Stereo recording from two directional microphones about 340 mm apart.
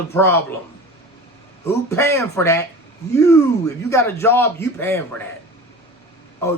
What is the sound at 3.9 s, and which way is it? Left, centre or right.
A man's voice, centre.